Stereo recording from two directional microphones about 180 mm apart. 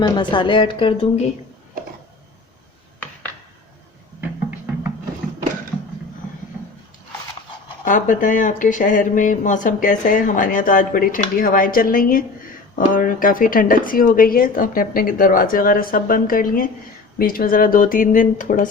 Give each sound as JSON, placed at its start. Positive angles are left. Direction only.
{"t": 0.0, "sound": "a woman's voice", "side_deg": 25}
{"t": 4.2, "sound": "music", "side_deg": -10}
{"t": 7.9, "sound": "speech", "side_deg": 45}